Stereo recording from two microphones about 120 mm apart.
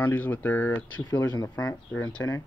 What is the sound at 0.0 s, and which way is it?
Speech, 15° left (ahead or behind).